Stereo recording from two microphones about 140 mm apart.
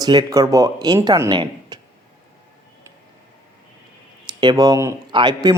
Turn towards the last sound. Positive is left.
turn(degrees=-30)  # may be behind; listen again after turning